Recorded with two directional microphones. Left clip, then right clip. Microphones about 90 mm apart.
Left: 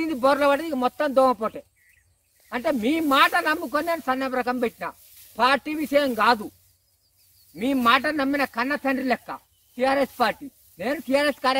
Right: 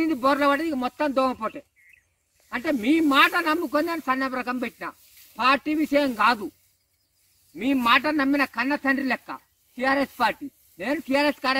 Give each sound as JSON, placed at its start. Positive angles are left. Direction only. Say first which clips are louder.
{"t": 0.0, "sound": "speech", "louder": "left 1 dB", "side_deg": 35}
{"t": 7.5, "sound": "speech", "louder": "even", "side_deg": 35}